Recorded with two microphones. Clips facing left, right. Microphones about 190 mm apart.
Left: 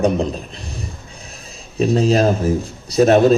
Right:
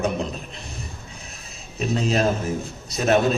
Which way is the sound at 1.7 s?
35° left (ahead or behind).